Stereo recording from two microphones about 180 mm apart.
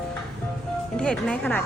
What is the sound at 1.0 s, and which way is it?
Speech, 5° left (ahead or behind).